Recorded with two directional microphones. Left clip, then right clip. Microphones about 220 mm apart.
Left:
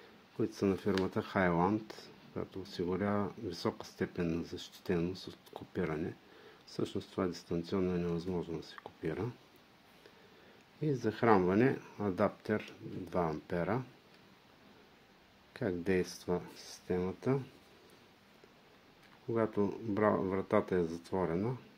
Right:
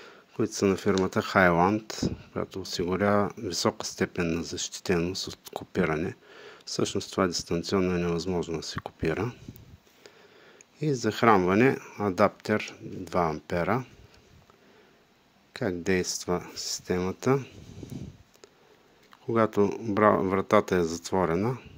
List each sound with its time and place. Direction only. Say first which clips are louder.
0.4 s speech: right 8 dB; 30° right (ahead or behind)
10.8 s speech: right 8 dB; 35° right (ahead or behind)
15.5 s speech: right 6 dB; 25° right (ahead or behind)
19.3 s speech: right 9 dB; 40° right (ahead or behind)